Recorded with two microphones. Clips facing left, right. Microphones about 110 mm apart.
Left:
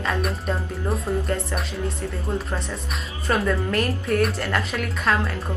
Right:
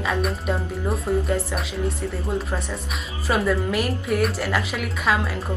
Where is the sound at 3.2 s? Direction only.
5° right (ahead or behind).